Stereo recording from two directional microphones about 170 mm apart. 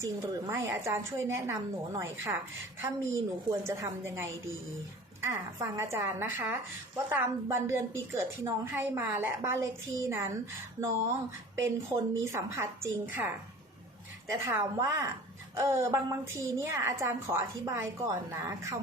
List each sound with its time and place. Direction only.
0.0 s a woman's voice: 15° right (ahead or behind)
3.5 s a woman's voice: 15° right (ahead or behind)